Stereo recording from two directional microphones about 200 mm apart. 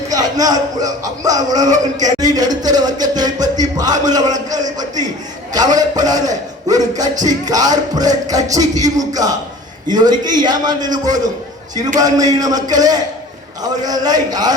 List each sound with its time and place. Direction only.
0.1 s speech: 20° right (ahead or behind)
2.1 s music: 20° right (ahead or behind)
3.8 s speech: 20° right (ahead or behind)
7.4 s music: 20° right (ahead or behind)
9.9 s speech: 20° right (ahead or behind)
11.9 s music: 20° right (ahead or behind)
12.3 s speech: 20° right (ahead or behind)